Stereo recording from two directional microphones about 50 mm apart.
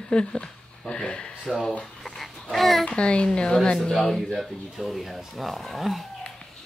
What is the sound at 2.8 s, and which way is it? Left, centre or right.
A child's voice, left.